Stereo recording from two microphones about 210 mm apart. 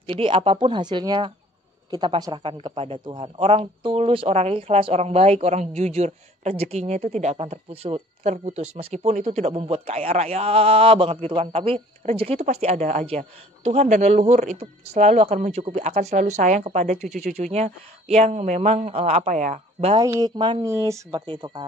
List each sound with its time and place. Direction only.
0.1 s speech: 25° right (ahead or behind)
20.1 s speech: 15° right (ahead or behind)